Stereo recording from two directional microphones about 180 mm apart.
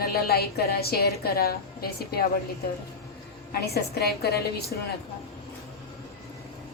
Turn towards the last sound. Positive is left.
turn(degrees=60)  # may be behind; listen again after turning